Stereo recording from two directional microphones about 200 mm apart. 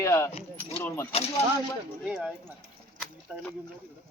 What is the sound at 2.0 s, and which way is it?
Speech, 5° right (ahead or behind).